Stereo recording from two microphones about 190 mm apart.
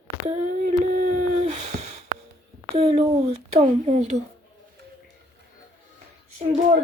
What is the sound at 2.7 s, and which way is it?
Speech, 30° right (ahead or behind).